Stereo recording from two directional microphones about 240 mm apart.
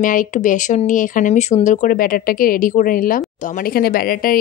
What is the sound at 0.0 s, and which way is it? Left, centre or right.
Speech, left.